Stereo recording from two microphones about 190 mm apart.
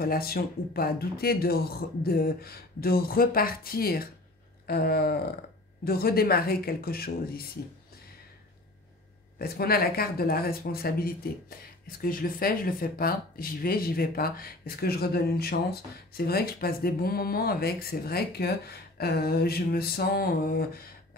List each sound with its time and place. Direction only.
0.0 s speech: 50° left (ahead or behind)
9.4 s speech: 55° left (ahead or behind)